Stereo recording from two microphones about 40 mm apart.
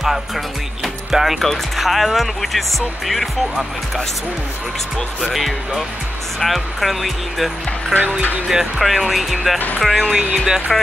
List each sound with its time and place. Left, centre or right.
1.1 s speech: centre
1.4 s speech: centre
5.2 s speech: centre
7.9 s speech: right
8.5 s speech: centre
10.1 s speech: centre